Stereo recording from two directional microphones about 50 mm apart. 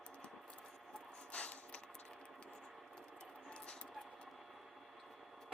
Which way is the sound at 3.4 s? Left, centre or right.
Left.